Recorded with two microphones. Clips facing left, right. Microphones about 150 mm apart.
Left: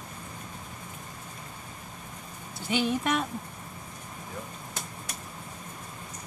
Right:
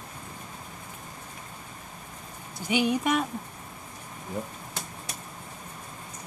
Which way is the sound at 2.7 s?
15° right (ahead or behind).